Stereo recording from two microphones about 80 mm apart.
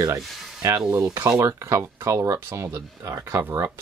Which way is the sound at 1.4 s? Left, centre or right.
Right.